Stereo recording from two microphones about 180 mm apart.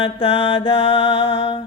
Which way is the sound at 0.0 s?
30° left (ahead or behind).